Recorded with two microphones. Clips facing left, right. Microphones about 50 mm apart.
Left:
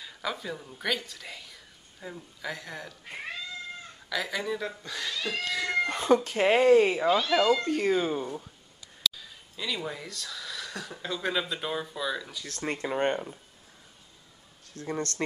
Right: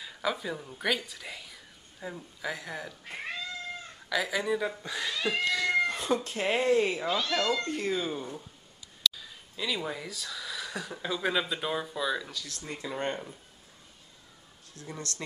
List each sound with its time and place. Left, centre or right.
0.0 s speech: centre
6.0 s a woman's voice: left
7.1 s speech: centre
7.8 s speech: left
9.1 s speech: centre
12.8 s a woman's voice: left
14.7 s a woman's voice: left